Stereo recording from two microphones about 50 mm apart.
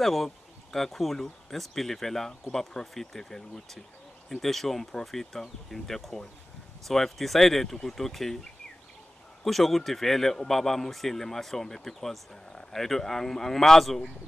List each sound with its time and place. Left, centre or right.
0.0 s a man's voice: centre
9.4 s a man's voice: centre